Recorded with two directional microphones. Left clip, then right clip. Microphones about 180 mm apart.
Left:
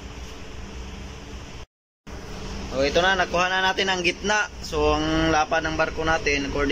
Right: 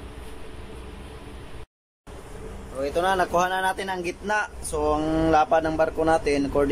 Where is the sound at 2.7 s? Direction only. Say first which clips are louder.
Left 3 dB; 10° right (ahead or behind).